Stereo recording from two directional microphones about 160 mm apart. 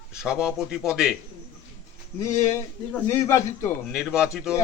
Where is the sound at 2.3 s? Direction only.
15° left (ahead or behind).